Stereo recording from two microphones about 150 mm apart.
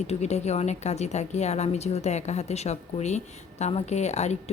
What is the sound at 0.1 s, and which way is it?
Speech, 45° left (ahead or behind).